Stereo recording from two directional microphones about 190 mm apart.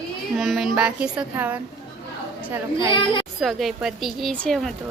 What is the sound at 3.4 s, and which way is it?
A woman's voice, centre (ahead or behind).